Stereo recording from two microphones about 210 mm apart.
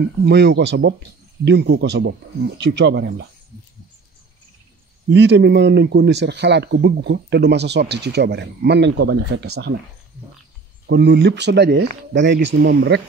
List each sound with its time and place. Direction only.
0.0 s speech: 55° right (ahead or behind)
5.1 s speech: 55° right (ahead or behind)
10.9 s speech: 55° right (ahead or behind)